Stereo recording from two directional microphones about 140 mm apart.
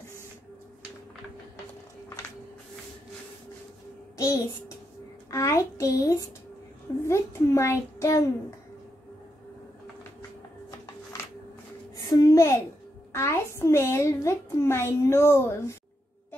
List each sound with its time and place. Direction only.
4.2 s a child's voice: 25° left (ahead or behind)
12.1 s a sound: 25° left (ahead or behind)
13.1 s a woman's voice: 20° left (ahead or behind)